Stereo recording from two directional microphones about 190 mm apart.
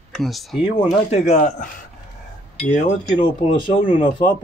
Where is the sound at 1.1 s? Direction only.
35° left (ahead or behind).